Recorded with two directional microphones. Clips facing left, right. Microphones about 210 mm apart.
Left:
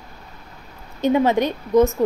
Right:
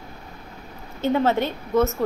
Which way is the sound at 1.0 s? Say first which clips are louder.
Left 3 dB; 15° left (ahead or behind).